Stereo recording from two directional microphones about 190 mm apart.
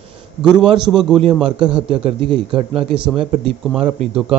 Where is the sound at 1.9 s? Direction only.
30° right (ahead or behind).